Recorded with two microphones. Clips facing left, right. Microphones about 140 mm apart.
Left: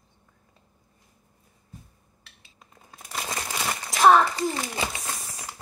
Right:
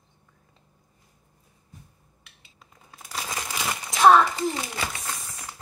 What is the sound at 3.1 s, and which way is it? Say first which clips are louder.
Crumpling: left 1 dB; centre (ahead or behind).